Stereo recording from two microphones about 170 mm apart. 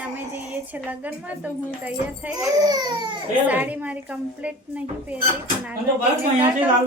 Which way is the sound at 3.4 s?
10° right (ahead or behind).